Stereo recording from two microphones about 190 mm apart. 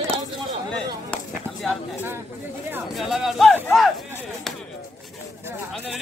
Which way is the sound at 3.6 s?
Centre (ahead or behind).